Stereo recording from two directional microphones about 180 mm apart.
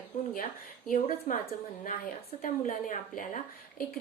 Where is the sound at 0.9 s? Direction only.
50° left (ahead or behind).